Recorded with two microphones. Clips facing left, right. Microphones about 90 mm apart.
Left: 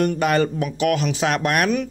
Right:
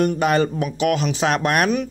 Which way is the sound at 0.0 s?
20° right (ahead or behind).